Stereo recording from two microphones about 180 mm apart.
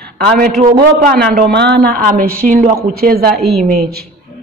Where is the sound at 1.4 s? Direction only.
65° right (ahead or behind).